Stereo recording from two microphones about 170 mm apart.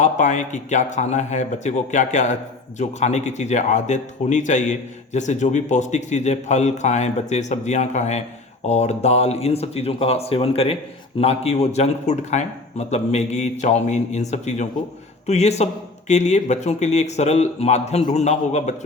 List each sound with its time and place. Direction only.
0.0 s a man's voice: 45° left (ahead or behind)